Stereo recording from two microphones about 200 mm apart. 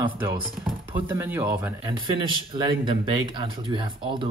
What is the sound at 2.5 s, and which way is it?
Speech, 25° right (ahead or behind).